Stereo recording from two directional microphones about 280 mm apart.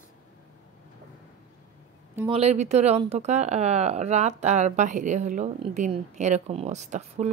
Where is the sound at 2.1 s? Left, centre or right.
Centre.